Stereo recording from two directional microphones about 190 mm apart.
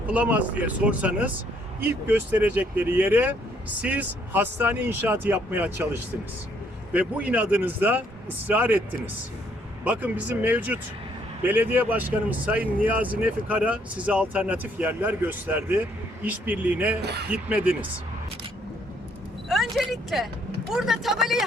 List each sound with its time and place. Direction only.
0.1 s speech: 10° right (ahead or behind)
9.8 s speech: 5° right (ahead or behind)
17.0 s speech: 60° right (ahead or behind)
17.3 s speech: 5° right (ahead or behind)
19.5 s speech: centre (ahead or behind)